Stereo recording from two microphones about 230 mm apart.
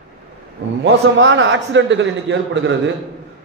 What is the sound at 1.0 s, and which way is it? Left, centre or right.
A man's voice, right.